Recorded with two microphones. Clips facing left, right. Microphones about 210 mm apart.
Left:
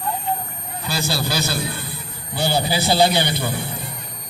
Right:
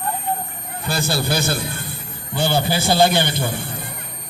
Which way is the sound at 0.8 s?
55° right (ahead or behind).